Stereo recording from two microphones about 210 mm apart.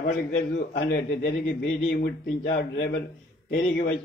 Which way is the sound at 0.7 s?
50° left (ahead or behind).